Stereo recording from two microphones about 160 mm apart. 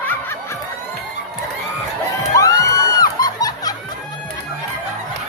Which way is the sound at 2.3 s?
20° left (ahead or behind).